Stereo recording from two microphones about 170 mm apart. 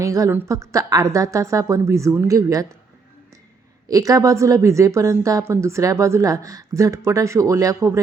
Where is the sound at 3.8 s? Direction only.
20° right (ahead or behind).